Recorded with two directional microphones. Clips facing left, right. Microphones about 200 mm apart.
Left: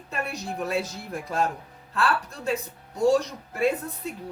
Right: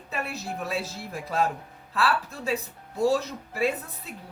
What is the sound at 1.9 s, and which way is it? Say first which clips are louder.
A woman's voice: even; centre (ahead or behind).